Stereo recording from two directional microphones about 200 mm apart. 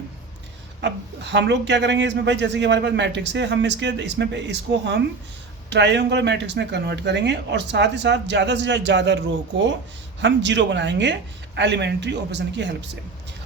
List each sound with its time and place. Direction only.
0.8 s speech: 60° right (ahead or behind)